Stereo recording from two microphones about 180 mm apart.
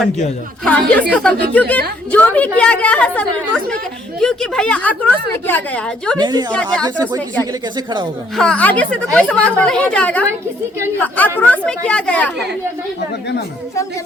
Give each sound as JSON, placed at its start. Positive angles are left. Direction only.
{"t": 0.6, "sound": "speech", "side_deg": 5}
{"t": 6.1, "sound": "a woman's voice", "side_deg": -25}
{"t": 6.5, "sound": "speech", "side_deg": 5}
{"t": 8.4, "sound": "speech", "side_deg": 5}